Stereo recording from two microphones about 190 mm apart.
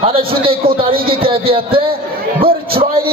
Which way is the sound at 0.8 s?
50° right (ahead or behind).